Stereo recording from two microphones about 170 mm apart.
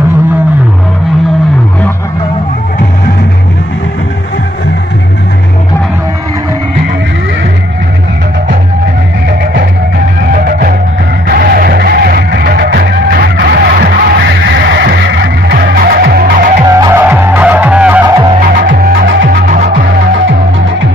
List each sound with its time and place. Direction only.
9.4 s music: 70° right (ahead or behind)
10.3 s music: 55° right (ahead or behind)
16.6 s vehicle: 20° right (ahead or behind)
18.5 s music: 60° right (ahead or behind)